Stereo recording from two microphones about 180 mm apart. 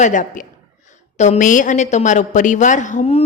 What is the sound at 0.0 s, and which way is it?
A woman's voice, 45° left (ahead or behind).